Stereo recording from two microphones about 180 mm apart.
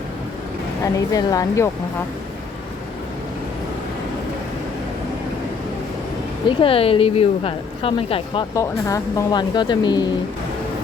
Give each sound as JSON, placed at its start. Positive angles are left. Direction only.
{"t": 0.9, "sound": "a woman's voice", "side_deg": 20}
{"t": 6.5, "sound": "a woman's voice", "side_deg": 30}